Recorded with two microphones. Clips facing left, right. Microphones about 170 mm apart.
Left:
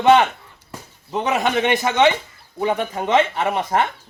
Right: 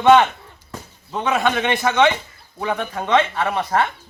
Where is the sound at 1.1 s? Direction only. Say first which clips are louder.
Even; 20° left (ahead or behind).